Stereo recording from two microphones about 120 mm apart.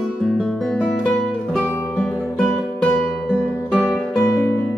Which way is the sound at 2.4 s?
Centre (ahead or behind).